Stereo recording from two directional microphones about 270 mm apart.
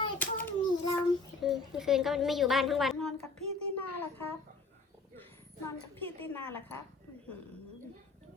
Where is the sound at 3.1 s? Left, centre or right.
Right.